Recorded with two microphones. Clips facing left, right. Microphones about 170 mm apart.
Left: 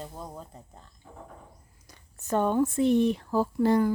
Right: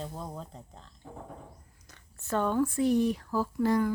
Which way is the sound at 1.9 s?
20° left (ahead or behind).